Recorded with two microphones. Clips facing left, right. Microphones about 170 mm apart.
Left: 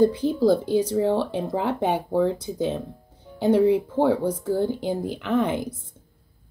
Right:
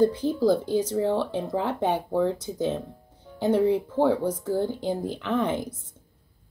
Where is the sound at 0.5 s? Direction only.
10° left (ahead or behind).